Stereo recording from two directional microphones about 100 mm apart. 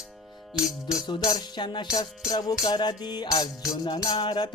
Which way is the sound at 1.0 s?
45° left (ahead or behind).